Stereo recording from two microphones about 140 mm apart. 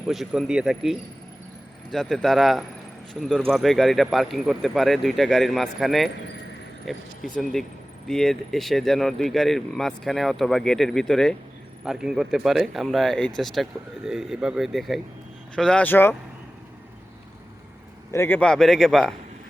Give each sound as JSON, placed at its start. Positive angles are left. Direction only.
{"t": 0.1, "sound": "speech", "side_deg": 0}
{"t": 8.0, "sound": "speech", "side_deg": 5}
{"t": 18.1, "sound": "a man's voice", "side_deg": 20}
{"t": 18.3, "sound": "speech", "side_deg": 5}